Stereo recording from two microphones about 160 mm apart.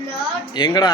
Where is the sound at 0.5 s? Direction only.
25° left (ahead or behind).